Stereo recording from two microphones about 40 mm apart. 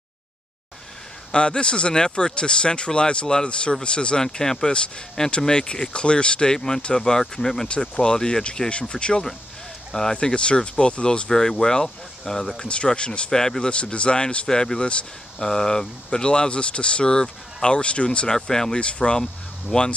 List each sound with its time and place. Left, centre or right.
1.3 s speech: left
4.2 s speech: centre
7.6 s speech: left
10.2 s speech: left
11.2 s speech: centre
12.6 s speech: left
14.9 s speech: left
15.4 s speech: centre
18.8 s speech: left